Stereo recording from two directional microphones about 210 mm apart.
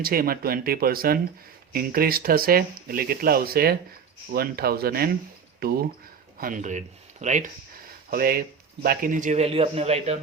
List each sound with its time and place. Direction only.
0.0 s a man's voice: 45° right (ahead or behind)